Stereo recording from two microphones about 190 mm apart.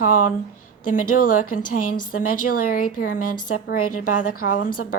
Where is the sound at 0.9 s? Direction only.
45° left (ahead or behind).